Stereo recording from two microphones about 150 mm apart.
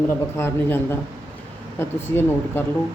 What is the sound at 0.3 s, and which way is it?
Speech, 15° left (ahead or behind).